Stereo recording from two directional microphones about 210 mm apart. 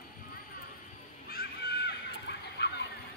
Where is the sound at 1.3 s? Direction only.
50° left (ahead or behind).